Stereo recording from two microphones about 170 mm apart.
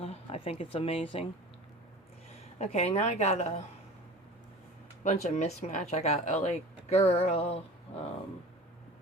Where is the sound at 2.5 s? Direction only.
40° left (ahead or behind).